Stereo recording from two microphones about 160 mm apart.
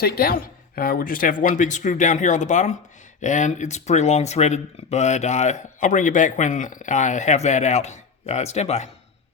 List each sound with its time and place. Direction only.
0.0 s speech: 70° left (ahead or behind); by 8.9 s 45° left (ahead or behind)